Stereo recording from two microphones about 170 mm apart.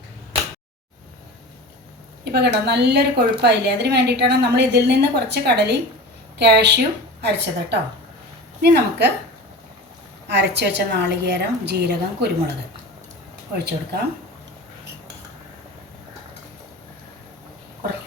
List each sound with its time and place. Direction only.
2.2 s a woman's voice: 75° right (ahead or behind)
8.6 s a woman's voice: 75° right (ahead or behind)
10.2 s a woman's voice: 90° right
13.6 s a woman's voice: 70° right (ahead or behind)